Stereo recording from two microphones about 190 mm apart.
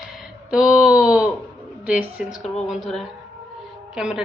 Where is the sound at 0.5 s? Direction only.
5° right (ahead or behind).